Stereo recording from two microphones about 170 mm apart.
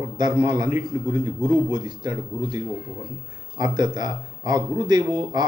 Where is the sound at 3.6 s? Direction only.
25° right (ahead or behind).